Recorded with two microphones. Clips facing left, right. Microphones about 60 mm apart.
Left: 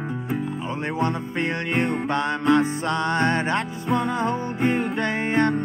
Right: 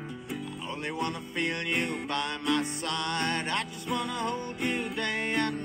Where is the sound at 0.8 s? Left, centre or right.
Left.